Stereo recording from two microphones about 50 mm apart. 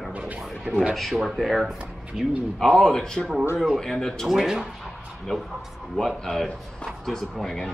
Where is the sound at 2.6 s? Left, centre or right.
Centre.